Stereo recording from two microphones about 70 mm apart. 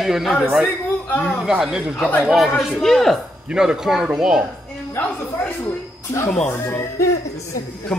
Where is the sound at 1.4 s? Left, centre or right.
Centre.